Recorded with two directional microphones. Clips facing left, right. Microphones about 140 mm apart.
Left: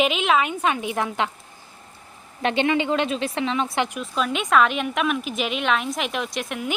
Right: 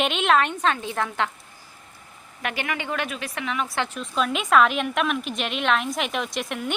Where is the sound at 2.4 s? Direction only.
25° left (ahead or behind).